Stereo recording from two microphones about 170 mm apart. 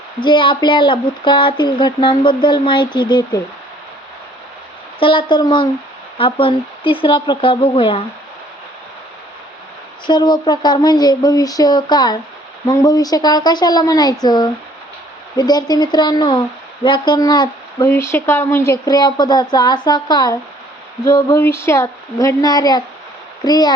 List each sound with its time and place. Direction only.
0.2 s speech: 25° left (ahead or behind)
4.9 s speech: 30° left (ahead or behind)
10.1 s speech: 25° left (ahead or behind)